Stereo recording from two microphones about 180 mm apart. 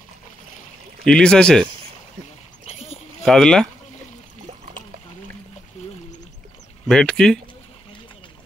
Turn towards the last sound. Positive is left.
turn(degrees=5)  # may be behind; listen again after turning